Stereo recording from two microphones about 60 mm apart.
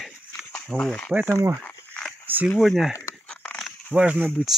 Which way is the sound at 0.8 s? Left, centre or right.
Centre.